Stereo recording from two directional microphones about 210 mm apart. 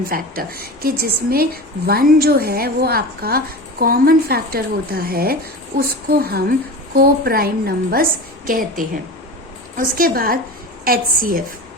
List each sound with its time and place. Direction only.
0.0 s a woman's voice: 45° right (ahead or behind)